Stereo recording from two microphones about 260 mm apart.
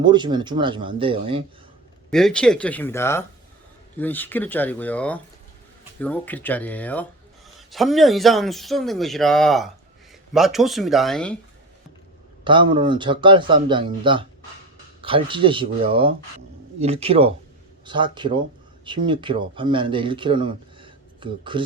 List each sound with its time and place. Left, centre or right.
0.0 s speech: centre
2.0 s speech: centre
12.5 s speech: centre